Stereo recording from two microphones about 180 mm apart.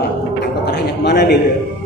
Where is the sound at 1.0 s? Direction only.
65° left (ahead or behind).